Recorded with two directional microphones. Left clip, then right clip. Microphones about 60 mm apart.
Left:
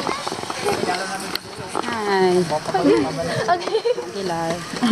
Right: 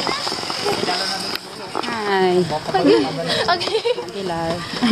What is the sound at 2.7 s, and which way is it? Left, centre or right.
Speech, right.